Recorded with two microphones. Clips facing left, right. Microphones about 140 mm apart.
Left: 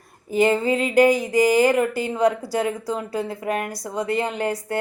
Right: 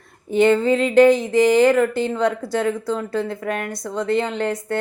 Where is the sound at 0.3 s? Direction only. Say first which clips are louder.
Right 3 dB; 5° left (ahead or behind).